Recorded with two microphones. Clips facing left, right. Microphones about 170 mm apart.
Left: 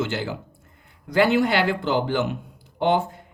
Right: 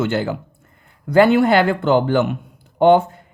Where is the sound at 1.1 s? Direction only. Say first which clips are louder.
Right 6 dB; 50° right (ahead or behind).